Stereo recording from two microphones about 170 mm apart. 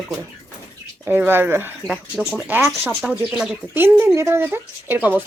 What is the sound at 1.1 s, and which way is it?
Speech, 10° right (ahead or behind).